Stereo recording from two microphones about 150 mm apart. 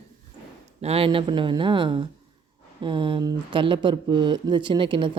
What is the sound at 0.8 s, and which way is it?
Speech, 40° right (ahead or behind).